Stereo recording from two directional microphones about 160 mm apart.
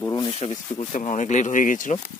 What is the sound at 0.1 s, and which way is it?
Speech, 30° left (ahead or behind).